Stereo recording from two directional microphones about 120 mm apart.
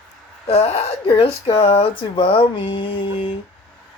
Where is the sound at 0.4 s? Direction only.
55° left (ahead or behind).